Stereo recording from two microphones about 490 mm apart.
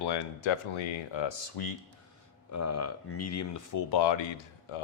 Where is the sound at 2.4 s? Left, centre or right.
Left.